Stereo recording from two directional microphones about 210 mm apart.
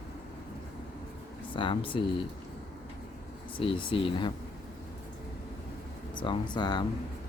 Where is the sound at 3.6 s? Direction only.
25° left (ahead or behind).